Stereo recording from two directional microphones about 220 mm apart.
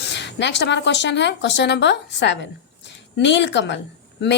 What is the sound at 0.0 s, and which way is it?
A woman's voice, 50° left (ahead or behind).